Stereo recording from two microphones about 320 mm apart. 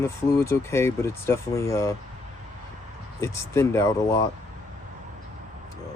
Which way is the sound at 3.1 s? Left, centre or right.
Centre.